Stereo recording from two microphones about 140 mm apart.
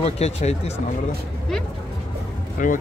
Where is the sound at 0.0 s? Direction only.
50° left (ahead or behind).